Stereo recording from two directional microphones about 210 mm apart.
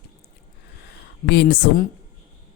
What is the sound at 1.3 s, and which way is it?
Speech, 50° left (ahead or behind).